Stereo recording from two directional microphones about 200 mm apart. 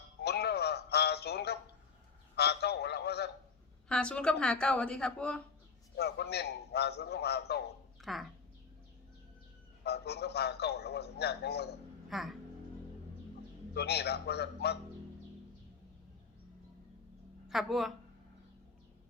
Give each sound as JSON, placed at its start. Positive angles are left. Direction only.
{"t": 0.2, "sound": "music", "side_deg": 55}
{"t": 2.3, "sound": "a sound", "side_deg": 55}
{"t": 3.8, "sound": "a woman's voice", "side_deg": 5}
{"t": 6.0, "sound": "a man's voice", "side_deg": 55}
{"t": 8.0, "sound": "speech", "side_deg": 0}
{"t": 9.8, "sound": "a man's voice", "side_deg": 55}
{"t": 12.0, "sound": "speech", "side_deg": 0}
{"t": 13.7, "sound": "a man's voice", "side_deg": 55}
{"t": 17.5, "sound": "a woman's voice", "side_deg": 0}